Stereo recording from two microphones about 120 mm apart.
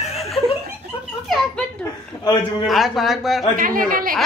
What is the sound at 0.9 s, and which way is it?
Giggle, 50° left (ahead or behind).